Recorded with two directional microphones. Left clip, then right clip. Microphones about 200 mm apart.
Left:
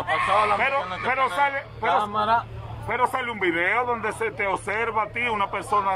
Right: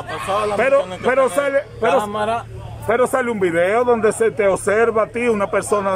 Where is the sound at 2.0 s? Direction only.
15° right (ahead or behind).